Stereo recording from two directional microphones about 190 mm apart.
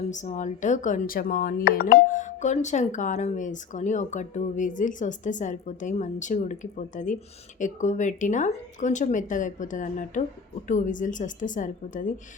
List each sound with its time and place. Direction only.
0.1 s a woman's voice: 40° left (ahead or behind)